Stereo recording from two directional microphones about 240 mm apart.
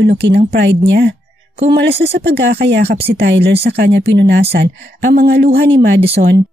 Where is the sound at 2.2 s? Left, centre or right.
Right.